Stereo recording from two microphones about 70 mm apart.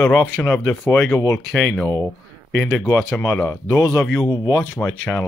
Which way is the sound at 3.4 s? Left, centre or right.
Left.